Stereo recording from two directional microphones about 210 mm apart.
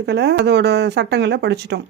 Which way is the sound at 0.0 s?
55° right (ahead or behind).